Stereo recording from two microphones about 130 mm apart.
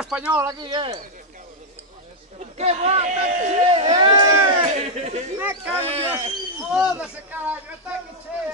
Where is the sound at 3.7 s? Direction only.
45° right (ahead or behind).